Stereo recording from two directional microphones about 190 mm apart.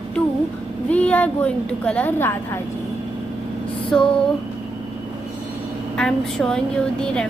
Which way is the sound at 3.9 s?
5° left (ahead or behind).